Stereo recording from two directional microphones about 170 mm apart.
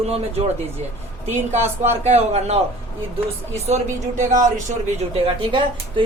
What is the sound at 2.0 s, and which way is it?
Speech, 40° right (ahead or behind).